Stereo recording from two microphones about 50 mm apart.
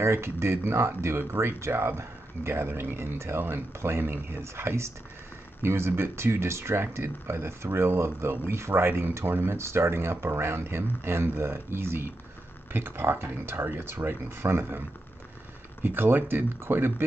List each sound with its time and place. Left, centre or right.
0.0 s speech: right
15.8 s speech: right